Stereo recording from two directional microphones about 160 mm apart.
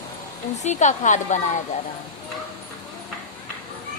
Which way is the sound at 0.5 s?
45° left (ahead or behind).